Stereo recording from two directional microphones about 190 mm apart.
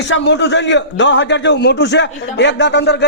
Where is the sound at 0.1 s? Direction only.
70° left (ahead or behind).